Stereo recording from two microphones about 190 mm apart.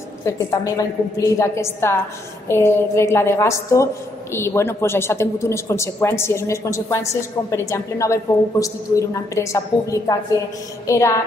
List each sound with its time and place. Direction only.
0.2 s a woman's voice: 15° left (ahead or behind)